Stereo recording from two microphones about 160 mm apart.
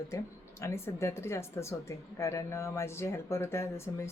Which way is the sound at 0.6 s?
15° left (ahead or behind).